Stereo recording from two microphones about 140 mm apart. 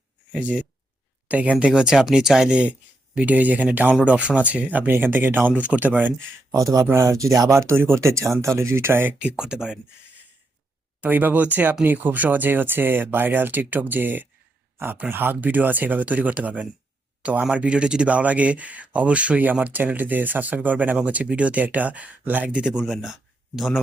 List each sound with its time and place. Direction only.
0.3 s speech: 10° right (ahead or behind)
6.5 s speech: 25° right (ahead or behind); by 9.7 s 5° right (ahead or behind)
11.0 s speech: 10° right (ahead or behind)